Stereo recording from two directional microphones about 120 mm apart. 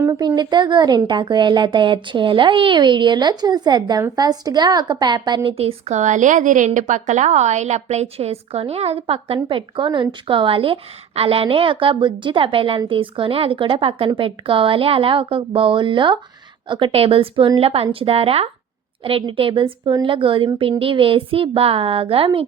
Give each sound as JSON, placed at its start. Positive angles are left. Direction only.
{"t": 0.2, "sound": "speech", "side_deg": -35}
{"t": 5.9, "sound": "a woman's voice", "side_deg": -85}